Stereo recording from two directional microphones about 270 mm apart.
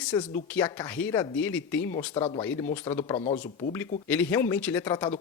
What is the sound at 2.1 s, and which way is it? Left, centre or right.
Speech, left.